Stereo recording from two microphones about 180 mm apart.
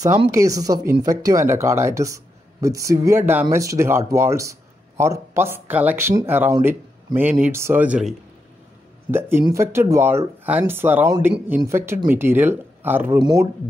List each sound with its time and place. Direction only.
0.3 s speech: 20° right (ahead or behind)
9.1 s speech: 15° right (ahead or behind)